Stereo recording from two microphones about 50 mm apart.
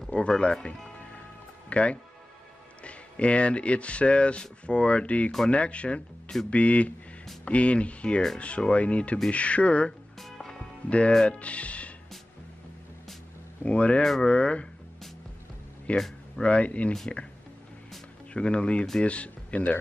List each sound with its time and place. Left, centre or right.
0.4 s speech: left
10.1 s music: centre
10.9 s speech: left
13.6 s speech: left
15.9 s speech: left
18.3 s speech: centre